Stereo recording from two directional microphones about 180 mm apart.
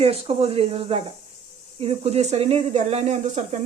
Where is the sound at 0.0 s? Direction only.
35° right (ahead or behind).